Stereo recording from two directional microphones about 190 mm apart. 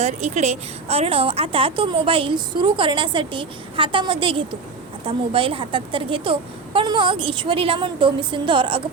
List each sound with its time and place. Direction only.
0.0 s a woman's voice: 35° right (ahead or behind)